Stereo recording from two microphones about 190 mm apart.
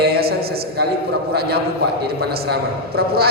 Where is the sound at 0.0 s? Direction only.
55° right (ahead or behind).